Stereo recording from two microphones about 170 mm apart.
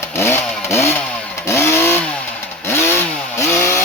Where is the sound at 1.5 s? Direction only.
15° left (ahead or behind).